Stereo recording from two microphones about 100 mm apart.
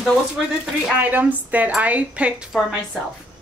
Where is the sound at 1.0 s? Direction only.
15° right (ahead or behind).